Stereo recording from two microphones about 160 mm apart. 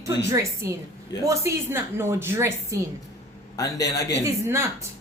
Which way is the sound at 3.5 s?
20° left (ahead or behind).